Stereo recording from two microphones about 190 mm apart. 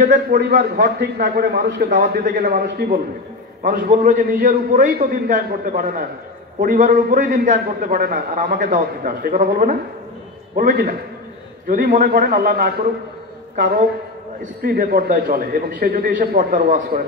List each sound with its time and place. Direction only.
0.0 s a man's voice: 45° right (ahead or behind)
14.6 s a man's voice: 50° right (ahead or behind)